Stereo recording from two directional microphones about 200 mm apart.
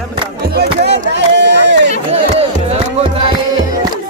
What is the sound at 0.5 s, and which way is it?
Chop, 55° right (ahead or behind).